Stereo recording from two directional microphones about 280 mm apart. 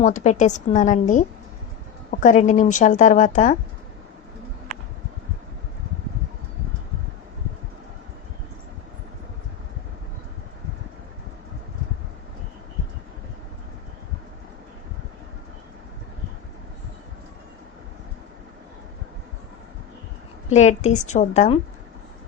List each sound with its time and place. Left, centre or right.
0.0 s speech: left
20.5 s speech: left